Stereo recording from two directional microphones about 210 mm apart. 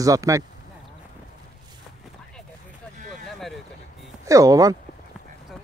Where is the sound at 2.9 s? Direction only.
35° right (ahead or behind).